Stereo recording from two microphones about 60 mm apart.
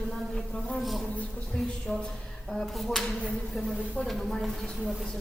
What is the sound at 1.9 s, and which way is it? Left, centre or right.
Speech, centre.